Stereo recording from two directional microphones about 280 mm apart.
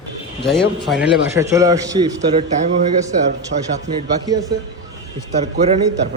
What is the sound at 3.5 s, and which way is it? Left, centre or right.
Speech, right.